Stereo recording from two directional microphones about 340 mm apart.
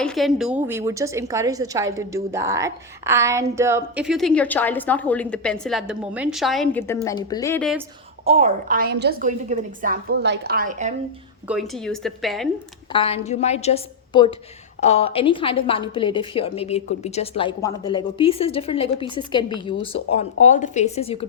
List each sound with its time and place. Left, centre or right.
0.0 s a woman's voice: centre
8.2 s a woman's voice: centre
11.4 s a woman's voice: centre
12.9 s a woman's voice: centre